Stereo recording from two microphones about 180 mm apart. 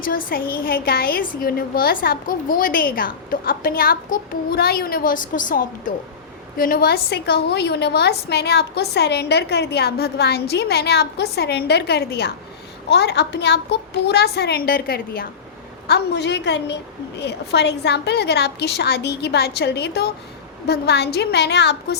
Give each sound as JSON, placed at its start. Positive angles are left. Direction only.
{"t": 0.0, "sound": "a woman's voice", "side_deg": 50}
{"t": 15.9, "sound": "a woman's voice", "side_deg": 70}